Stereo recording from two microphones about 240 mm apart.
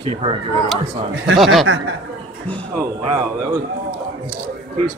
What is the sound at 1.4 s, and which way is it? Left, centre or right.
Speech, centre.